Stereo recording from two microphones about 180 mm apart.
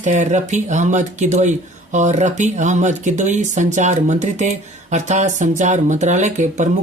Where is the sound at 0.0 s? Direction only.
45° right (ahead or behind).